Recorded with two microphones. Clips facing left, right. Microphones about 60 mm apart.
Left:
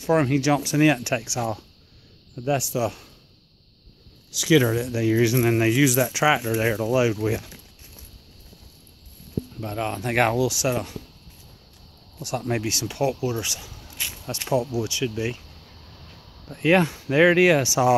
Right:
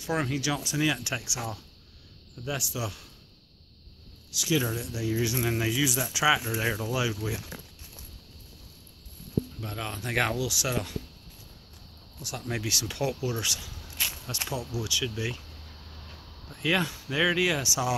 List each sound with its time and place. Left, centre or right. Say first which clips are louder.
0.0 s speech: left 9 dB; left
4.3 s speech: left 9 dB; left
6.6 s speech: left 7 dB; left
7.0 s speech: left 9 dB; left
9.6 s speech: left 8 dB; left
10.7 s speech: left 5 dB; left
12.2 s speech: left 8 dB; left
12.8 s speech: left 5 dB; centre
13.9 s a sound: even; centre
14.5 s speech: left 10 dB; left
16.5 s speech: left 8 dB; left